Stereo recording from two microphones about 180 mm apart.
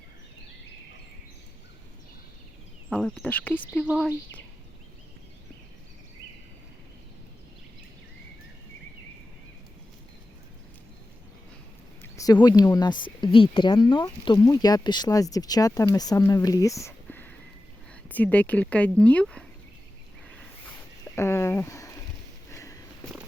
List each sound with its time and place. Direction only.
2.9 s speech: 5° left (ahead or behind)
3.8 s speech: centre (ahead or behind)
12.1 s speech: 20° left (ahead or behind); by 19.5 s 5° left (ahead or behind)
21.2 s speech: 15° left (ahead or behind)
22.5 s sniff: 15° left (ahead or behind)